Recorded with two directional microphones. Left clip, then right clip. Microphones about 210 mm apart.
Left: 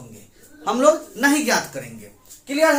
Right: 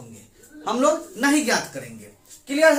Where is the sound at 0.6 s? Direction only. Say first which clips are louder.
Left 4 dB; centre (ahead or behind).